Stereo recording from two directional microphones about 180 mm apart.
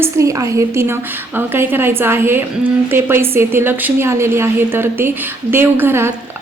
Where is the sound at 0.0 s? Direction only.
15° right (ahead or behind).